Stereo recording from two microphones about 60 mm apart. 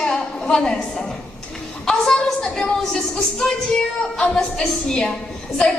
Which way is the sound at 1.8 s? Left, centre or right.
Centre.